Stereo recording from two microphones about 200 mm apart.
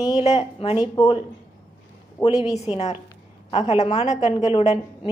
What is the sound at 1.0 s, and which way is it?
Speech, 20° left (ahead or behind).